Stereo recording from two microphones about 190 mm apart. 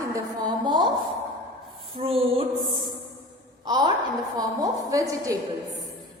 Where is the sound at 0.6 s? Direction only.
25° right (ahead or behind).